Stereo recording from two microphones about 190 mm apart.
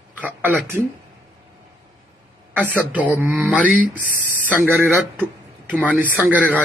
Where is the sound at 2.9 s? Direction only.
10° right (ahead or behind).